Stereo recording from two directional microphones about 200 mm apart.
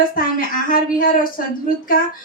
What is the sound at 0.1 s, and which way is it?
Speech, 45° left (ahead or behind).